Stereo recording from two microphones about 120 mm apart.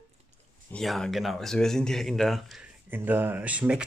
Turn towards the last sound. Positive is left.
turn(degrees=-10)  # may be behind; listen again after turning